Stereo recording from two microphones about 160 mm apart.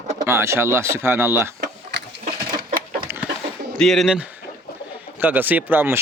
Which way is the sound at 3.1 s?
15° right (ahead or behind).